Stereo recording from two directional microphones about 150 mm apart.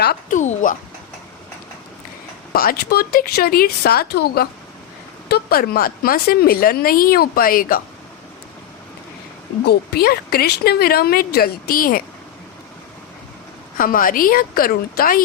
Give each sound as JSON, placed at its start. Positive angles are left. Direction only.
{"t": 0.0, "sound": "speech", "side_deg": 90}
{"t": 0.3, "sound": "speech", "side_deg": 55}
{"t": 2.5, "sound": "a woman's voice", "side_deg": 85}
{"t": 9.6, "sound": "speech", "side_deg": 90}
{"t": 13.7, "sound": "a woman's voice", "side_deg": 70}